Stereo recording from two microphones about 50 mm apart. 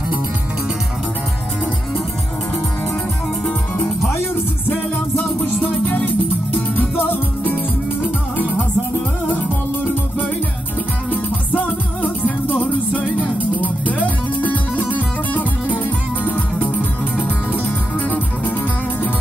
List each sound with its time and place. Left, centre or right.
5.1 s music: left
11.1 s music: left